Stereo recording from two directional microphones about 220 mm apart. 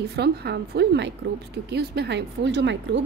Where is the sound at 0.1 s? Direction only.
50° right (ahead or behind).